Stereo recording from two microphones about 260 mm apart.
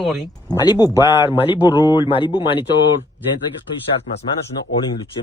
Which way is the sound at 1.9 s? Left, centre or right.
Centre.